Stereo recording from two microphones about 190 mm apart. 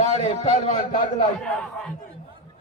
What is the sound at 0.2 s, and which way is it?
Speech, 35° left (ahead or behind).